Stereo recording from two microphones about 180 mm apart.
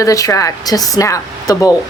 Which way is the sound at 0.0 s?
20° left (ahead or behind).